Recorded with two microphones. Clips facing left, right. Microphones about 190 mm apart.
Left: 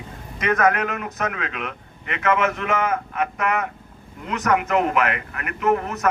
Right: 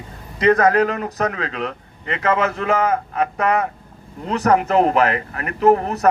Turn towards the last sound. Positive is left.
turn(degrees=-35)  # may be behind; listen again after turning